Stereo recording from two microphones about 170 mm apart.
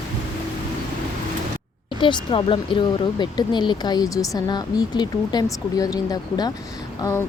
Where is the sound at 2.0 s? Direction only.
30° left (ahead or behind).